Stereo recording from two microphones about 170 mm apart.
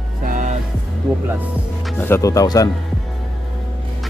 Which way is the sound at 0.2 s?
50° right (ahead or behind).